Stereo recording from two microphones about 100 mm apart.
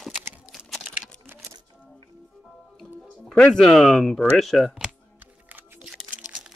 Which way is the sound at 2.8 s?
5° left (ahead or behind).